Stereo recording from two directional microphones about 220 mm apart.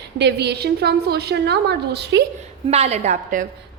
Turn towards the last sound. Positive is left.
turn(degrees=-35)  # may be behind; listen again after turning